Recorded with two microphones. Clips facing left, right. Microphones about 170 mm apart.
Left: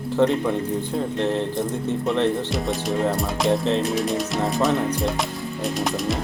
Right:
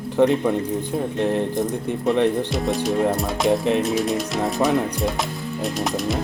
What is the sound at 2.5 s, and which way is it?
Music, centre (ahead or behind).